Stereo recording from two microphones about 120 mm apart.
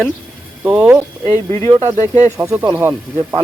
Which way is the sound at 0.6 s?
5° right (ahead or behind).